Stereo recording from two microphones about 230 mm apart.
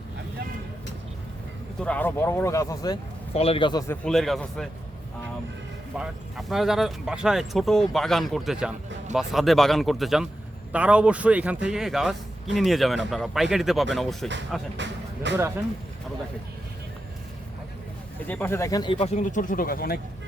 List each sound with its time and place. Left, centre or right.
1.8 s speech: centre
4.0 s speech: centre
6.0 s speech: centre
14.8 s music: right
18.3 s speech: centre; by 20.0 s left